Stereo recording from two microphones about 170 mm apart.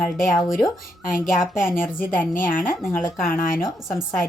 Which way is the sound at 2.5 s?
55° left (ahead or behind).